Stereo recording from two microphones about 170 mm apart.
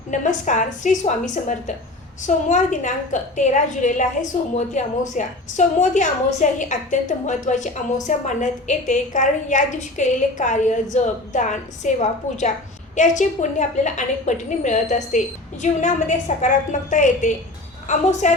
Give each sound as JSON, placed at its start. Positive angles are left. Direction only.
{"t": 0.1, "sound": "a woman's voice", "side_deg": 45}